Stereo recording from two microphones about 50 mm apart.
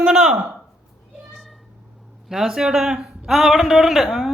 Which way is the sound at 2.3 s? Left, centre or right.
Centre.